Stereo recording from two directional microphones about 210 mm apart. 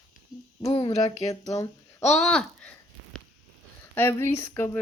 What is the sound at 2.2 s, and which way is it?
Speech, 5° left (ahead or behind).